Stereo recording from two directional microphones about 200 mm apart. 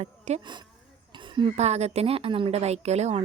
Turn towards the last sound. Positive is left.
turn(degrees=-35)  # may be behind; listen again after turning